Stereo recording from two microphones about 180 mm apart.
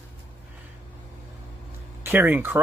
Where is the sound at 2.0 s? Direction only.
10° right (ahead or behind).